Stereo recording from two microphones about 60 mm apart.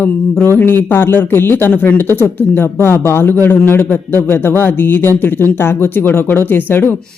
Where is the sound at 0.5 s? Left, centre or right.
Left.